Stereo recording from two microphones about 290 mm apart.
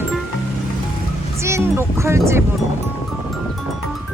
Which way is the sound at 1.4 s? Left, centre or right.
Centre.